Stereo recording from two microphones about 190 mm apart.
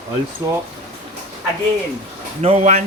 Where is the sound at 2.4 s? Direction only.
35° right (ahead or behind).